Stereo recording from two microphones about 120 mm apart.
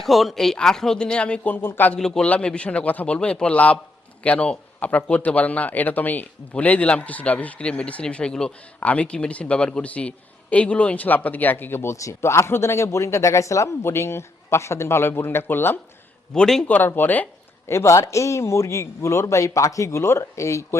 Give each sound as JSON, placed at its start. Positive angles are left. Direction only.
{"t": 0.0, "sound": "speech", "side_deg": 0}
{"t": 2.0, "sound": "speech", "side_deg": 5}
{"t": 16.3, "sound": "a man's voice", "side_deg": 5}